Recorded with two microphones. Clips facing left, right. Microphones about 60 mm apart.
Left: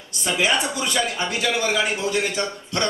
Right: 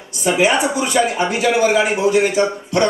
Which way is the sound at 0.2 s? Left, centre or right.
Right.